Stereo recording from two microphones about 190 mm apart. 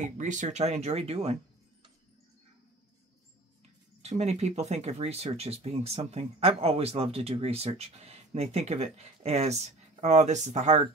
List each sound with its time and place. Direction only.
0.0 s speech: 40° right (ahead or behind)
4.0 s speech: 35° right (ahead or behind)